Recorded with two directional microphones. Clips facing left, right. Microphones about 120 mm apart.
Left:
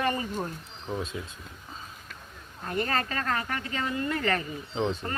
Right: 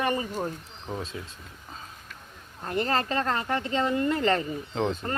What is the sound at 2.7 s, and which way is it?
A woman's voice, 30° right (ahead or behind).